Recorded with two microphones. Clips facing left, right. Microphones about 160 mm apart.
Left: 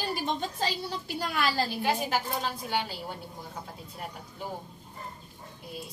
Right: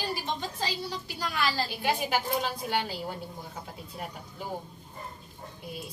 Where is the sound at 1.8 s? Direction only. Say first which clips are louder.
Even; centre (ahead or behind).